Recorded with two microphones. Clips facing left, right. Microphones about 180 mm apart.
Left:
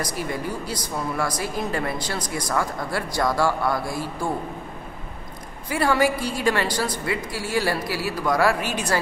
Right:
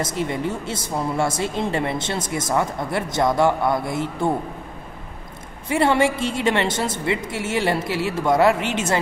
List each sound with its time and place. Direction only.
0.0 s speech: 25° right (ahead or behind)
5.7 s speech: 25° right (ahead or behind)